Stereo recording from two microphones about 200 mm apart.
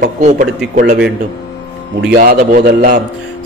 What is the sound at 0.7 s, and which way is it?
Speech, 50° right (ahead or behind).